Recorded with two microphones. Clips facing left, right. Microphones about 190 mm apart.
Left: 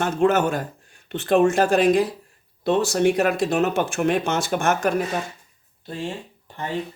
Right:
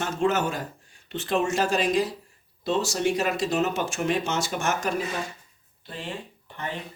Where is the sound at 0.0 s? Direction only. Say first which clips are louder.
Left 5 dB; 55° left (ahead or behind).